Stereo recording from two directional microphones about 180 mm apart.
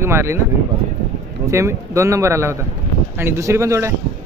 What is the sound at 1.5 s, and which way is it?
A man's voice, 15° right (ahead or behind).